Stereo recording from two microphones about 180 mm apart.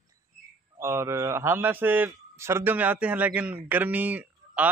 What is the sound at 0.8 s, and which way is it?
A man's voice, 15° right (ahead or behind).